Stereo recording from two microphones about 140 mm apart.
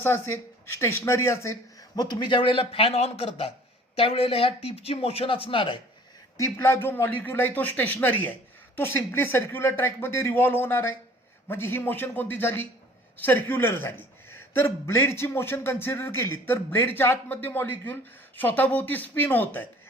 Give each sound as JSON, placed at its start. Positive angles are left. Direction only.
{"t": 0.0, "sound": "speech", "side_deg": 15}
{"t": 2.0, "sound": "a man's voice", "side_deg": 30}
{"t": 6.3, "sound": "a man's voice", "side_deg": 20}